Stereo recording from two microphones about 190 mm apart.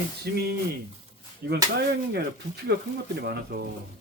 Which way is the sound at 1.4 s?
60° right (ahead or behind).